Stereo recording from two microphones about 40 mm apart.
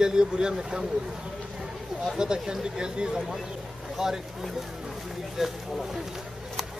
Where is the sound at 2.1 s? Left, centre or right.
Centre.